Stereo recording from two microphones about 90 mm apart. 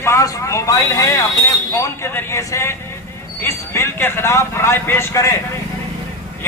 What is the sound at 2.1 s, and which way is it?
Speech, 30° left (ahead or behind).